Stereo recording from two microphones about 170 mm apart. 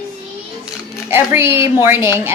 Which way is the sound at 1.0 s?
15° right (ahead or behind).